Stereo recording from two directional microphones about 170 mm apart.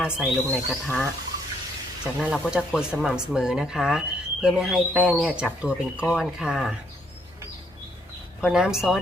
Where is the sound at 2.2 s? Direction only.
5° right (ahead or behind).